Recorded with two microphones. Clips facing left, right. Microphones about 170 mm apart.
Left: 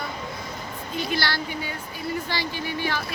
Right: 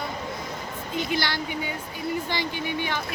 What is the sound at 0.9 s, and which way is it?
Speech, 20° right (ahead or behind).